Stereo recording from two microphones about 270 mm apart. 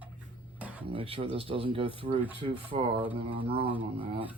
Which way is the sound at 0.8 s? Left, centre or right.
Centre.